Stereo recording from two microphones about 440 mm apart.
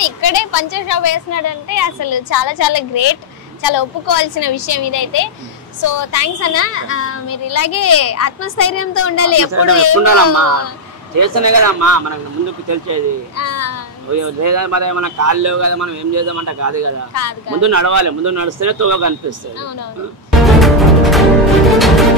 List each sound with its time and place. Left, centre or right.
0.0 s a woman's voice: left
9.5 s a man's voice: right
10.2 s a child's voice: left
11.1 s speech: right
13.4 s a child's voice: left
14.1 s a man's voice: right
20.2 s music: centre